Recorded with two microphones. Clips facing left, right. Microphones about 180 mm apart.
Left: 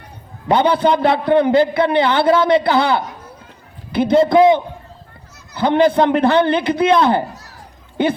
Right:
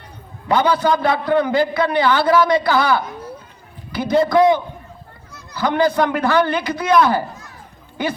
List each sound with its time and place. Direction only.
0.4 s a man's voice: 25° left (ahead or behind)